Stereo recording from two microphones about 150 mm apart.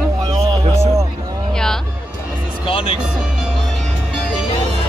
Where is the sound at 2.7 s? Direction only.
40° left (ahead or behind).